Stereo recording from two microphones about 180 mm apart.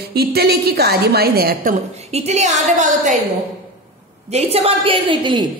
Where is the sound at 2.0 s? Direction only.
35° right (ahead or behind).